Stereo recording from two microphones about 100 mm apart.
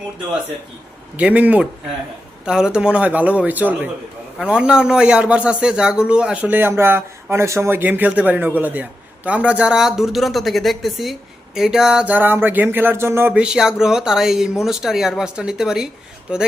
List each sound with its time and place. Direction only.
1.1 s a man's voice: 15° right (ahead or behind)
12.0 s speech: 20° right (ahead or behind)
13.4 s a man's voice: 5° right (ahead or behind)